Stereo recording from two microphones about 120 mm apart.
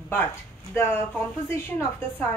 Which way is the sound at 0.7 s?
20° left (ahead or behind).